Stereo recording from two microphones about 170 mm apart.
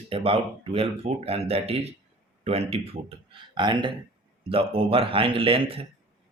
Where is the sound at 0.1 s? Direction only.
35° right (ahead or behind).